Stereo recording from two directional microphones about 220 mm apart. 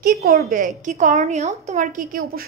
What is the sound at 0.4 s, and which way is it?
A woman's voice, 35° right (ahead or behind).